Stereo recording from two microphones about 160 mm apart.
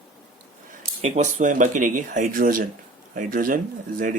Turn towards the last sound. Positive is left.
turn(degrees=-60)  # may be behind; listen again after turning